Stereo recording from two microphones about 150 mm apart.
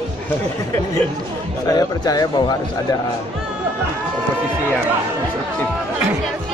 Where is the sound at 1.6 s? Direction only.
25° left (ahead or behind).